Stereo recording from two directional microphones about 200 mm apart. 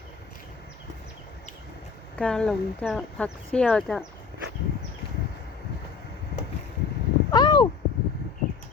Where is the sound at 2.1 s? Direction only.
5° left (ahead or behind).